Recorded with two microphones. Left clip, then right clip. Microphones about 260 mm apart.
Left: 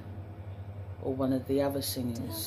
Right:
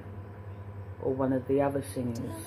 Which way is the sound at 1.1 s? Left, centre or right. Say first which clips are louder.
Right 2 dB; centre.